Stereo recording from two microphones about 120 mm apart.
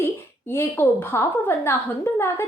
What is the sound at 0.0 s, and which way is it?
Speech, 20° left (ahead or behind).